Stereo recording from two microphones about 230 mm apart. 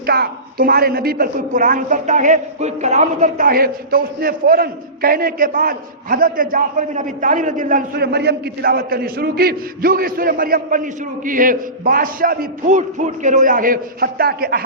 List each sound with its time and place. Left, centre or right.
0.0 s a woman's voice: right